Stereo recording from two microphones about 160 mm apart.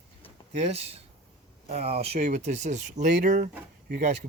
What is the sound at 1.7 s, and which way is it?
Speech, 40° right (ahead or behind).